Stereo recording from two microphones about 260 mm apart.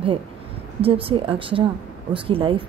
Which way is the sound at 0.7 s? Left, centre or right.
Right.